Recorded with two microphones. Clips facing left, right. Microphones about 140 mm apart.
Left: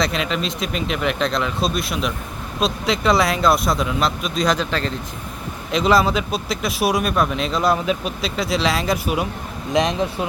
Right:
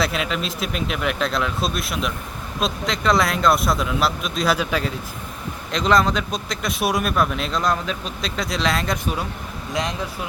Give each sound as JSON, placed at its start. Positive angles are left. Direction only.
{"t": 0.0, "sound": "speech", "side_deg": -5}
{"t": 5.7, "sound": "speech", "side_deg": 5}
{"t": 9.7, "sound": "speech", "side_deg": 20}